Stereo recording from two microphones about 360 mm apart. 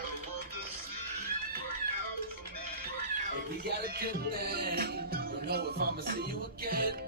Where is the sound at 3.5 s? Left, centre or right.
Right.